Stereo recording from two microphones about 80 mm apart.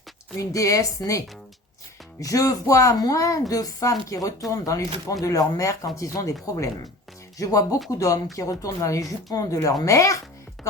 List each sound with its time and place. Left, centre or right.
0.3 s speech: left
2.2 s speech: left
7.3 s speech: left